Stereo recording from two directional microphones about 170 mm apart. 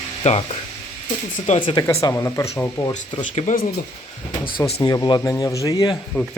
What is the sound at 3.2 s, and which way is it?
Speech, 45° left (ahead or behind).